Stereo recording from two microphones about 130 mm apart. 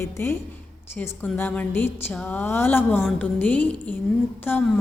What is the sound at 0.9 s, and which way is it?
A woman's voice, 15° left (ahead or behind).